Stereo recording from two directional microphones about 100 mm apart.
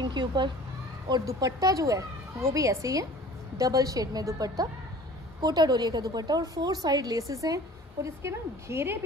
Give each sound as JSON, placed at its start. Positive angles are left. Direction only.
{"t": 0.0, "sound": "speech", "side_deg": -50}
{"t": 1.2, "sound": "a woman's voice", "side_deg": -35}